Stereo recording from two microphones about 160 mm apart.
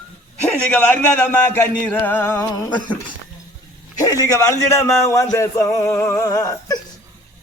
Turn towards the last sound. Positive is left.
turn(degrees=20)  # may be behind; listen again after turning